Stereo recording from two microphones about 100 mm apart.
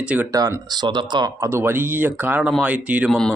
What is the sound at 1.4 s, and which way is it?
A man's voice, 25° right (ahead or behind).